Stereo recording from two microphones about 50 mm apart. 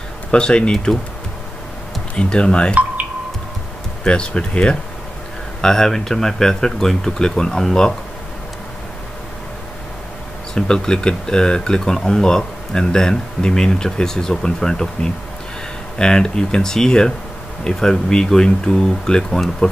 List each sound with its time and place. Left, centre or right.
0.3 s speech: centre
2.1 s speech: centre
4.0 s speech: centre
10.5 s speech: centre